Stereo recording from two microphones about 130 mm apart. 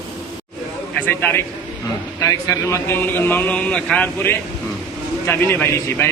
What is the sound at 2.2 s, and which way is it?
A man's voice, 25° left (ahead or behind).